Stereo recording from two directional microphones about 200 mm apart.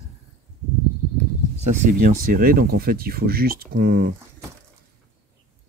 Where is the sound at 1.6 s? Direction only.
40° right (ahead or behind).